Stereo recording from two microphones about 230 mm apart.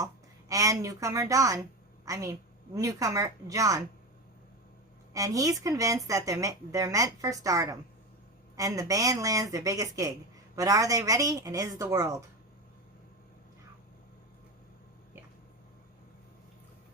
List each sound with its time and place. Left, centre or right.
0.0 s speech: centre
5.1 s speech: centre